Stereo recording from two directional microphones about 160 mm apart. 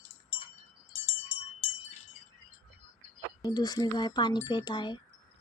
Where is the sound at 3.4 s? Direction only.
25° left (ahead or behind).